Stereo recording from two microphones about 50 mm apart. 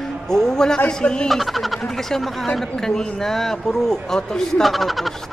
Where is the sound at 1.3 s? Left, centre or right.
Centre.